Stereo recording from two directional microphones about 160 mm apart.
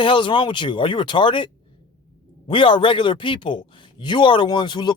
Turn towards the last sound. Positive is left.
turn(degrees=30)  # may be behind; listen again after turning